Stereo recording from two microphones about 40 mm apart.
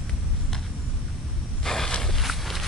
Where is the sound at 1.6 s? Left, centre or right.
Centre.